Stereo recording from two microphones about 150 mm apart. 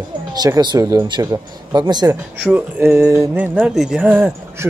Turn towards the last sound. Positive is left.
turn(degrees=-10)  # may be behind; listen again after turning